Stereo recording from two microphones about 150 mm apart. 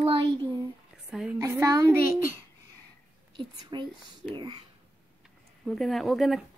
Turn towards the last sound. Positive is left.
turn(degrees=0)  # may be behind; listen again after turning